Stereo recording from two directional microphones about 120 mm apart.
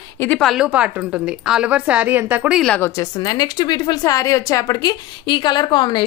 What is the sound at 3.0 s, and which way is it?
Speech, 35° left (ahead or behind).